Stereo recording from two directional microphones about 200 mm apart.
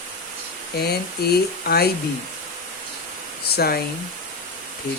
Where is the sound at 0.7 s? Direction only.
50° left (ahead or behind).